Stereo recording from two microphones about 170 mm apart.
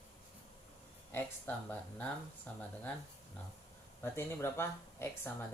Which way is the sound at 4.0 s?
15° left (ahead or behind).